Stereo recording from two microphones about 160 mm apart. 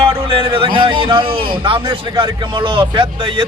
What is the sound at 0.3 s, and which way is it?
A man's voice, 35° right (ahead or behind).